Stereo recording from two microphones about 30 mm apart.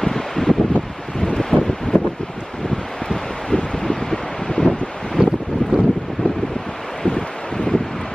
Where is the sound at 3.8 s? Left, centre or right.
Centre.